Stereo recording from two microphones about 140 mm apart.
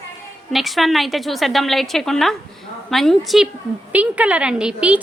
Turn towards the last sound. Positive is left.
turn(degrees=-10)  # may be behind; listen again after turning